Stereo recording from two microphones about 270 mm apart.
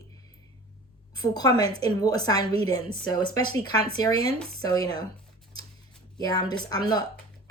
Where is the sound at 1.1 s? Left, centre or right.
Centre.